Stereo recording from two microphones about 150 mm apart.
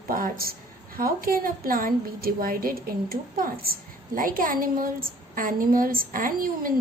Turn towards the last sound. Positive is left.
turn(degrees=-70)  # may be behind; listen again after turning